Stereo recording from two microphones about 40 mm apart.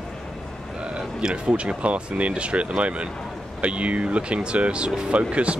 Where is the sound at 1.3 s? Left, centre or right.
Right.